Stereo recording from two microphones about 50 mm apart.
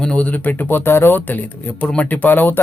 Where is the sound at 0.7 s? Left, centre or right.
Left.